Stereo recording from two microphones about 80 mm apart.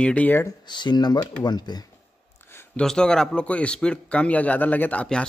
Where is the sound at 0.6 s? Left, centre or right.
Left.